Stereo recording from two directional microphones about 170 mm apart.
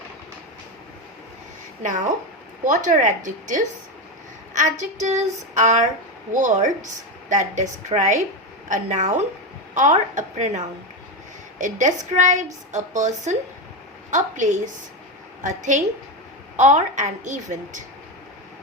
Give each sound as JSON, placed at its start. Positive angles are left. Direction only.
{"t": 2.6, "sound": "a woman's voice", "side_deg": -45}